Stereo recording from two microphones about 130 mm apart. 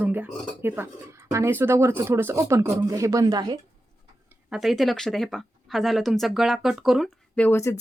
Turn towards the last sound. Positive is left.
turn(degrees=20)  # may be behind; listen again after turning